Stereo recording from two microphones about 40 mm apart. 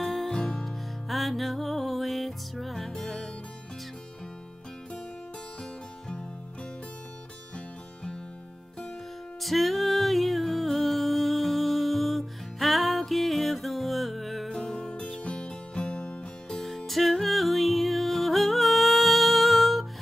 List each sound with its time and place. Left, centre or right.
0.0 s music: centre
1.0 s music: centre
5.6 s music: centre
7.5 s music: left
9.4 s music: centre
14.5 s music: centre
14.8 s music: left
16.4 s music: centre